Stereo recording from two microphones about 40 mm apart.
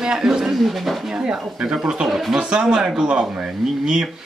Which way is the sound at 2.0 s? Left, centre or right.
Centre.